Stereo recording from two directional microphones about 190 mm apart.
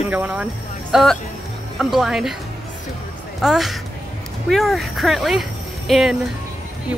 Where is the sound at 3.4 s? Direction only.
Centre (ahead or behind).